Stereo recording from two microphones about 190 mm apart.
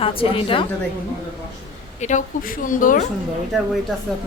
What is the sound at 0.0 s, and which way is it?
Speech, 30° left (ahead or behind).